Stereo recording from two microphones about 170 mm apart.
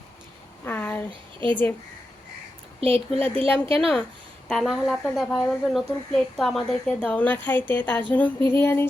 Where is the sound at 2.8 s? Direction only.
35° right (ahead or behind).